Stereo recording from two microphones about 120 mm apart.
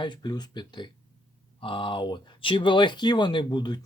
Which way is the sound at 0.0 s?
40° left (ahead or behind).